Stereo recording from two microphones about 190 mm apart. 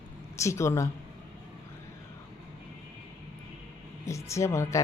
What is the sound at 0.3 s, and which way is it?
Speech, 15° left (ahead or behind).